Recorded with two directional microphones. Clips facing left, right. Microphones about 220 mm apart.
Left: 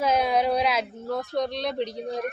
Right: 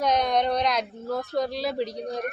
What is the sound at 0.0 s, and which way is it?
A man's voice, 5° left (ahead or behind).